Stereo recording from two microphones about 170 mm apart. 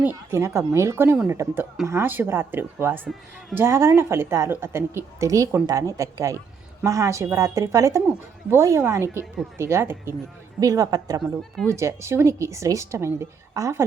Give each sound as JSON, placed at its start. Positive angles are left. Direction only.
{"t": 0.3, "sound": "a woman's voice", "side_deg": -15}